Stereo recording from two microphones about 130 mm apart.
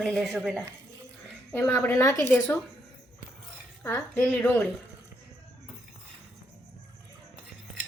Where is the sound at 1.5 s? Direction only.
15° left (ahead or behind).